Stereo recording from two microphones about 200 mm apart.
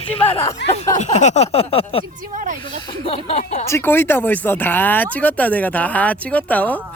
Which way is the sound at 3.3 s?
35° left (ahead or behind).